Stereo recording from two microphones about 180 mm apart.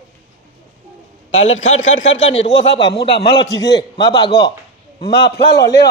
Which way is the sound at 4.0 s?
30° left (ahead or behind).